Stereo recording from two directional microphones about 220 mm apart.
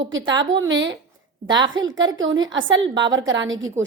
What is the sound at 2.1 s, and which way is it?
A woman's voice, 60° right (ahead or behind).